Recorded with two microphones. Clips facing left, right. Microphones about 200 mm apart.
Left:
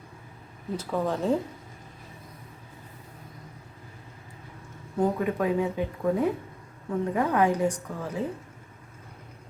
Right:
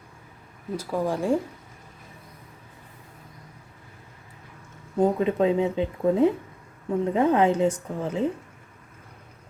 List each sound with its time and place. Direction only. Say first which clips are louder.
0.8 s speech: right 2 dB; 10° right (ahead or behind)
4.9 s speech: right 4 dB; 25° right (ahead or behind)